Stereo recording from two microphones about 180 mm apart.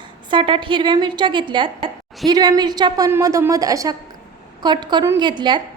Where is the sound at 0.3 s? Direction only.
25° right (ahead or behind).